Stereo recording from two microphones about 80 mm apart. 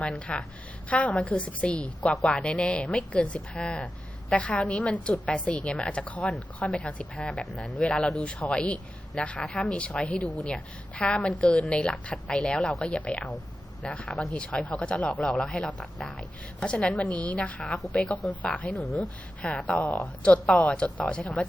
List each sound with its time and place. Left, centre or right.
0.3 s speech: centre